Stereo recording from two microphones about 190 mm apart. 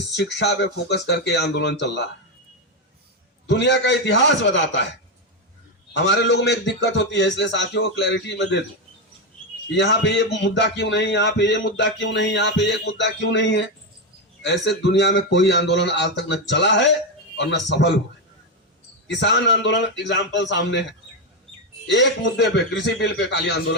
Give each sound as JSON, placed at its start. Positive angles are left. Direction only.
{"t": 0.2, "sound": "speech", "side_deg": 65}
{"t": 3.4, "sound": "speech", "side_deg": 65}
{"t": 5.9, "sound": "speech", "side_deg": 70}
{"t": 9.6, "sound": "speech", "side_deg": 65}
{"t": 19.0, "sound": "speech", "side_deg": 70}
{"t": 21.8, "sound": "speech", "side_deg": 70}